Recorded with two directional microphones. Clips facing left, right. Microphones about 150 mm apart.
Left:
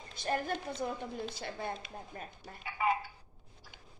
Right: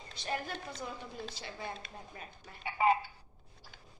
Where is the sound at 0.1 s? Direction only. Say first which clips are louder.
Left 4 dB; 50° left (ahead or behind).